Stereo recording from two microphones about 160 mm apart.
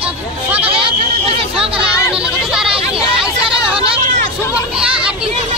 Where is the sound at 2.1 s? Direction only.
5° right (ahead or behind).